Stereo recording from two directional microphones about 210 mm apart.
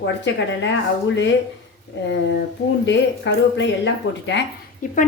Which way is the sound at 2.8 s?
60° left (ahead or behind).